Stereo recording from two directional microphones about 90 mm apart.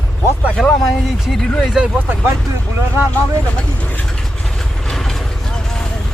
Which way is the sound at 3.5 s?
15° left (ahead or behind).